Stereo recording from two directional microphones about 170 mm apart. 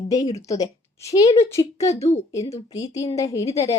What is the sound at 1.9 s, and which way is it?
Speech, 40° left (ahead or behind).